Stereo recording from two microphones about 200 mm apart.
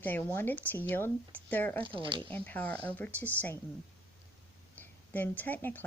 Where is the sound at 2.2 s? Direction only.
10° left (ahead or behind).